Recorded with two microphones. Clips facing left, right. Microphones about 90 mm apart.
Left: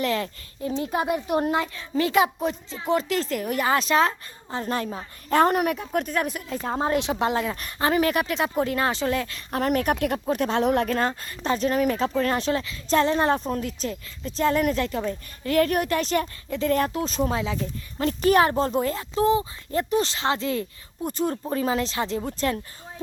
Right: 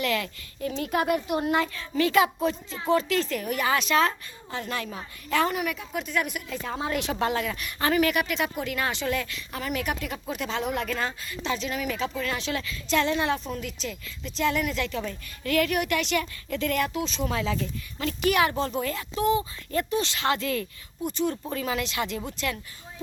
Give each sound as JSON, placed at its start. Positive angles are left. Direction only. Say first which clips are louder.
{"t": 0.0, "sound": "speech", "louder": "left 2 dB", "side_deg": 30}
{"t": 1.3, "sound": "speech", "louder": "left 3 dB", "side_deg": 35}
{"t": 1.5, "sound": "speech", "louder": "even", "side_deg": 25}
{"t": 6.9, "sound": "speech", "louder": "left 1 dB", "side_deg": 25}
{"t": 9.5, "sound": "speech", "louder": "left 8 dB", "side_deg": 50}
{"t": 10.8, "sound": "speech", "louder": "left 5 dB", "side_deg": 45}
{"t": 14.9, "sound": "speech", "louder": "left 4 dB", "side_deg": 25}
{"t": 16.5, "sound": "speech", "louder": "left 4 dB", "side_deg": 25}
{"t": 16.8, "sound": "speech", "louder": "left 4 dB", "side_deg": 40}
{"t": 17.3, "sound": "speech", "louder": "left 1 dB", "side_deg": 20}
{"t": 17.9, "sound": "speech", "louder": "left 5 dB", "side_deg": 35}